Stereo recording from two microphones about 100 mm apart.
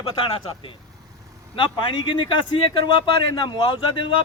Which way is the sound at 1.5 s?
60° left (ahead or behind).